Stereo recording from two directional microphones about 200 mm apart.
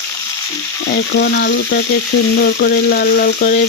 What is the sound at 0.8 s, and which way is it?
Frying, 60° left (ahead or behind).